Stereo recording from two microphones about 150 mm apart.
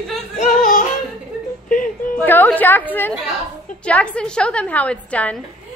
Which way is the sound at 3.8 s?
10° left (ahead or behind).